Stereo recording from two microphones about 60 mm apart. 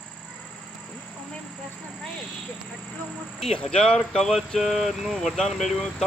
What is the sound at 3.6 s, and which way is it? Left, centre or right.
Speech, centre.